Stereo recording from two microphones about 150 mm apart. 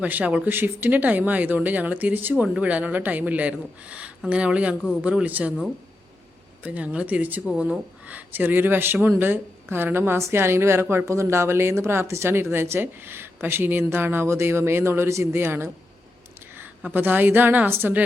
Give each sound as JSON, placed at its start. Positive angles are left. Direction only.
{"t": 0.0, "sound": "speech", "side_deg": -10}
{"t": 6.6, "sound": "speech", "side_deg": -10}